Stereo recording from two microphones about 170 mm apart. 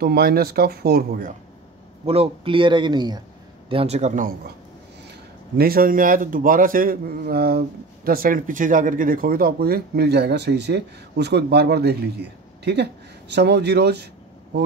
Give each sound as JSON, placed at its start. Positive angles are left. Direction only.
{"t": 0.0, "sound": "speech", "side_deg": -65}
{"t": 2.0, "sound": "speech", "side_deg": -35}
{"t": 5.6, "sound": "speech", "side_deg": -60}